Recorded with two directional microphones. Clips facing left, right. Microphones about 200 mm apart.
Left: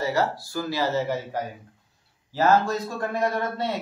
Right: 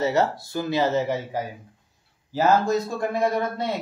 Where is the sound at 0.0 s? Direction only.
25° right (ahead or behind).